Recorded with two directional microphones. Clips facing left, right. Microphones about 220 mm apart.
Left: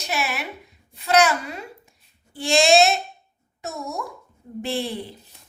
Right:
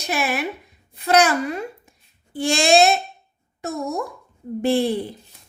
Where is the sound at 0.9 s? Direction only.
50° right (ahead or behind).